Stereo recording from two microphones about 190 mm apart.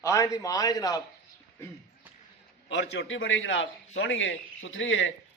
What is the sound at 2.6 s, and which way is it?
A man's voice, 70° left (ahead or behind).